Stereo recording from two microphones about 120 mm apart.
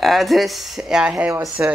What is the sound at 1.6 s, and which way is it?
Speech, 20° right (ahead or behind).